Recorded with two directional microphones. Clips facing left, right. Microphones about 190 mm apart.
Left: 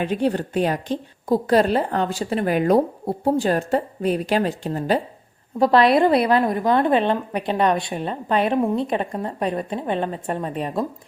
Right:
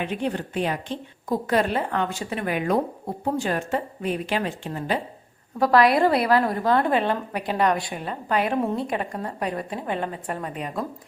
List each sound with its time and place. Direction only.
0.0 s a woman's voice: 35° left (ahead or behind)
5.5 s a woman's voice: 25° left (ahead or behind)